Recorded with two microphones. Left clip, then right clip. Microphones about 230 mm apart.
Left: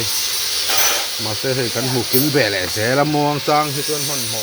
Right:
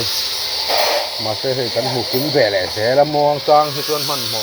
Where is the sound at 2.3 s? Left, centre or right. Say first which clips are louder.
Right 5 dB; left.